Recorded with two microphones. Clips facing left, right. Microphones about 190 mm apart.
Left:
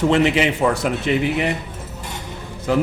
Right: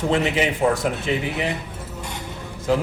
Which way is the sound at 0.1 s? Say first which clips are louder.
Left 4 dB; 80° left.